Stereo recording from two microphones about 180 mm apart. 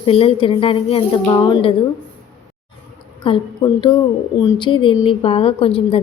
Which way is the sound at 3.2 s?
30° left (ahead or behind).